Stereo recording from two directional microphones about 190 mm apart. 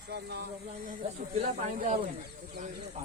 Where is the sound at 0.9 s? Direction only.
35° right (ahead or behind).